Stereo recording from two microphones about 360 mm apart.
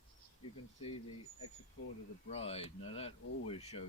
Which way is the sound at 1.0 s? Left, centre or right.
Left.